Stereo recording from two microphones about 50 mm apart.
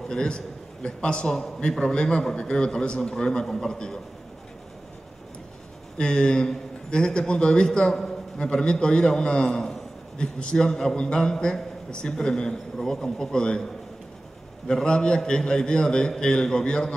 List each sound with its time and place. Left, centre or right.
0.1 s a man's voice: centre
5.9 s a man's voice: centre
14.7 s a man's voice: centre